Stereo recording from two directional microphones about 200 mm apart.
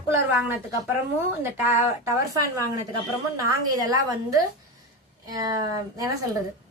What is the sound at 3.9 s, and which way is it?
A woman's voice, 20° right (ahead or behind).